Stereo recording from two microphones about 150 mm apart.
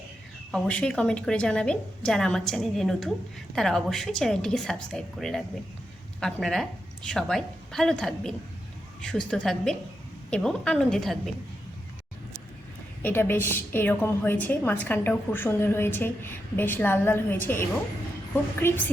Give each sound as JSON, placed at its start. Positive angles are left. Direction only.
{"t": 0.5, "sound": "a woman's voice", "side_deg": 5}
{"t": 13.0, "sound": "a woman's voice", "side_deg": 15}